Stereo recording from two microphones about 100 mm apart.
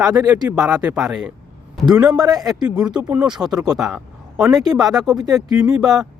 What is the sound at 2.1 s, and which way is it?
Speech, 40° right (ahead or behind).